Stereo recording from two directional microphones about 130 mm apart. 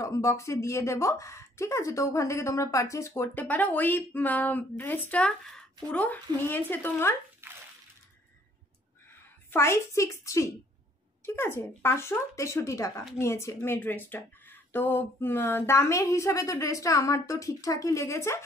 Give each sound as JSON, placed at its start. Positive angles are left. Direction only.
{"t": 0.0, "sound": "speech", "side_deg": 25}
{"t": 7.4, "sound": "a sound", "side_deg": -15}
{"t": 9.5, "sound": "speech", "side_deg": 20}